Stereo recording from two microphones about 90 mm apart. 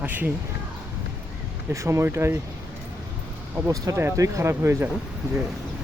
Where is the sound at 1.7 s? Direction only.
35° right (ahead or behind).